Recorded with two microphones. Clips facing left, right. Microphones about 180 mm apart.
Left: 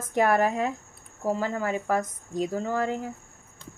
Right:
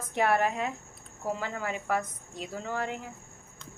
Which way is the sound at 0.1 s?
45° left (ahead or behind).